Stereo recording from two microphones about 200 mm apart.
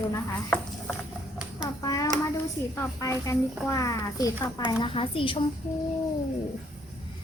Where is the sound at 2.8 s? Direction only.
15° left (ahead or behind).